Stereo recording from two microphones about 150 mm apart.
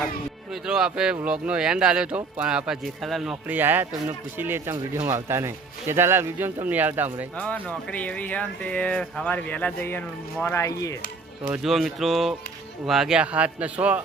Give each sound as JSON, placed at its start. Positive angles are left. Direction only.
{"t": 0.5, "sound": "speech", "side_deg": -5}
{"t": 7.3, "sound": "speech", "side_deg": 10}
{"t": 11.5, "sound": "speech", "side_deg": 0}